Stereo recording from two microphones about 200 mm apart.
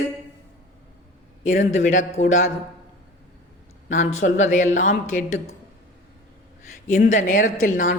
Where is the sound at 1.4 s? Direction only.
40° left (ahead or behind).